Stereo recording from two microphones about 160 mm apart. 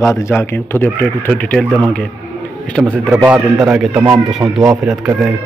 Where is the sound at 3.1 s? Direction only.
10° right (ahead or behind).